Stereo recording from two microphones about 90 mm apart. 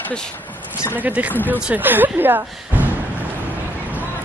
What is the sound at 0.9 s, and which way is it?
Speech, 15° right (ahead or behind).